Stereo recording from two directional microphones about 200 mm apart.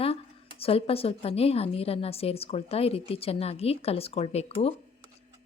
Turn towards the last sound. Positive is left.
turn(degrees=30)  # may be behind; listen again after turning